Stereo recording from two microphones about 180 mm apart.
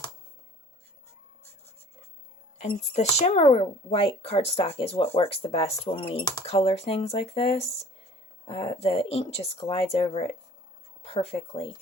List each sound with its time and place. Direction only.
2.6 s speech: 40° left (ahead or behind)